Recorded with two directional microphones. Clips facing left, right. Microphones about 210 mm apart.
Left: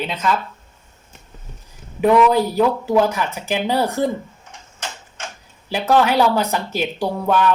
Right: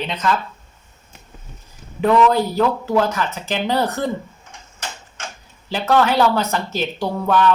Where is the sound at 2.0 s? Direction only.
10° left (ahead or behind).